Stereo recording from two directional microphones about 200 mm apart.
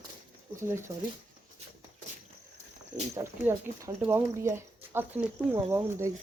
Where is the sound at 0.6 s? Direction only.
10° right (ahead or behind).